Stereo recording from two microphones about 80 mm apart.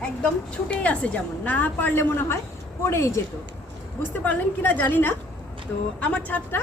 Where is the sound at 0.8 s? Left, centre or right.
Centre; by 3.2 s left.